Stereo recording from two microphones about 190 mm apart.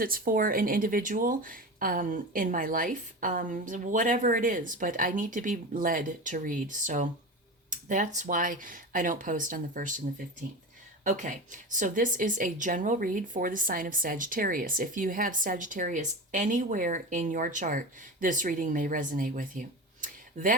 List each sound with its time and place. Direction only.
0.0 s speech: 50° right (ahead or behind)
11.0 s speech: 40° right (ahead or behind)